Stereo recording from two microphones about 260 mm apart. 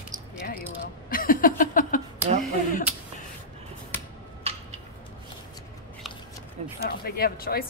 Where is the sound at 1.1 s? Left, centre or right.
Left.